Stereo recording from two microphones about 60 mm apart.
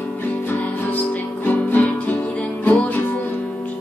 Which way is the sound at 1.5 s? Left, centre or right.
Left.